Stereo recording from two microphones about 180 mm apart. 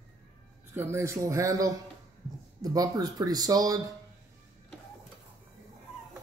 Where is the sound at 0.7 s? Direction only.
15° right (ahead or behind).